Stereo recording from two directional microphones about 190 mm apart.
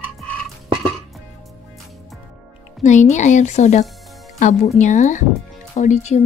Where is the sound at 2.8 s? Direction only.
40° left (ahead or behind).